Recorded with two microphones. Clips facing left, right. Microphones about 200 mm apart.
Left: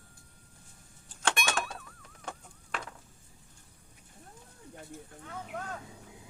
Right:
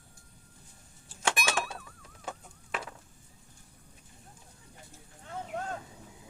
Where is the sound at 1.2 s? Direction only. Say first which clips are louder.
Right 1 dB; 5° right (ahead or behind).